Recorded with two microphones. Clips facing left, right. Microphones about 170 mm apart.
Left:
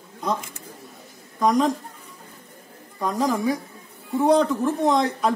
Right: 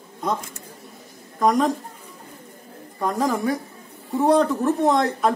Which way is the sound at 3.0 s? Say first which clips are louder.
Even; centre (ahead or behind).